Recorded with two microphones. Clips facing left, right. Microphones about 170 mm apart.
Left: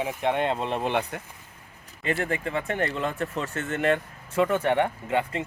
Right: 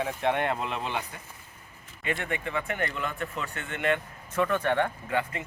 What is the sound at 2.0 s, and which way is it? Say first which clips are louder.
Speech: left 4 dB; 35° left (ahead or behind).